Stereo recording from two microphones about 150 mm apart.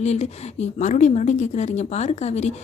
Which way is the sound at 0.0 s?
45° left (ahead or behind).